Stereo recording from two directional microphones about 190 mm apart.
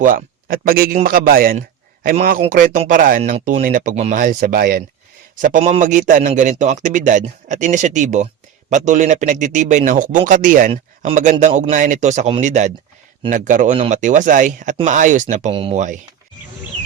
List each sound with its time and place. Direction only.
0.0 s a man's voice: 45° right (ahead or behind)
15.5 s speech: 30° right (ahead or behind)